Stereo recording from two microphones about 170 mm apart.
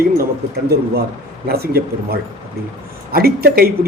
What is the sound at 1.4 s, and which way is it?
Speech, 65° right (ahead or behind).